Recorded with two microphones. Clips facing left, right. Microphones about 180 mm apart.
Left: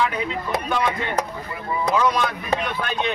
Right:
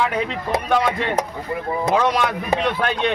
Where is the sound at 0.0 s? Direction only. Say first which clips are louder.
Right 2 dB; 70° right (ahead or behind).